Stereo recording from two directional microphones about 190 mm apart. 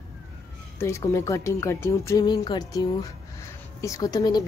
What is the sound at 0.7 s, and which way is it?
Speech, 15° left (ahead or behind).